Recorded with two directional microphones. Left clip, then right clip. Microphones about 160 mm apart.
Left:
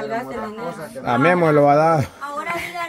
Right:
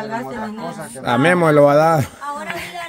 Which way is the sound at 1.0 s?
20° right (ahead or behind).